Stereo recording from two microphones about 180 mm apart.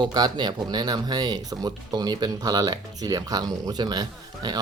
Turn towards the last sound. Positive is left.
turn(degrees=-25)  # may be behind; listen again after turning